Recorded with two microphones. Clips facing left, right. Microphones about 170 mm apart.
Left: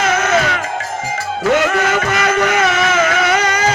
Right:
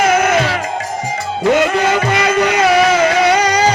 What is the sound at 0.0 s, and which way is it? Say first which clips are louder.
Music: right 3 dB; 30° right (ahead or behind).